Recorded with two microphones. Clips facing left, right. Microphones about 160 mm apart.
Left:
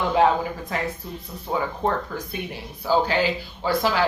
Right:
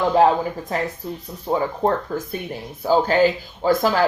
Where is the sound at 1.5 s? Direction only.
35° right (ahead or behind).